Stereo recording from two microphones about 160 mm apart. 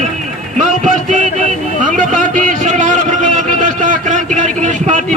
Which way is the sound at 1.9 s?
55° right (ahead or behind).